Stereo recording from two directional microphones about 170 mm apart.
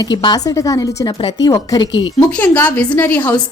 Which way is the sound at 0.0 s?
25° left (ahead or behind).